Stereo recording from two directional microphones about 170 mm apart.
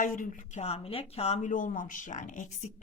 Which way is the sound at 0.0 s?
50° left (ahead or behind).